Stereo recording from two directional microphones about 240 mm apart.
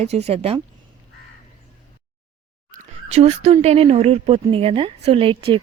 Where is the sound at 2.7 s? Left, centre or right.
Right.